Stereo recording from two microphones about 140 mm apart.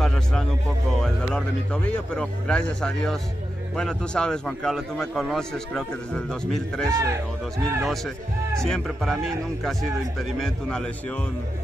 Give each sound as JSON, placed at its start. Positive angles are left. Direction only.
{"t": 0.0, "sound": "music", "side_deg": 0}
{"t": 1.0, "sound": "a man's voice", "side_deg": 10}
{"t": 6.9, "sound": "speech", "side_deg": -20}
{"t": 7.8, "sound": "a man's voice", "side_deg": 0}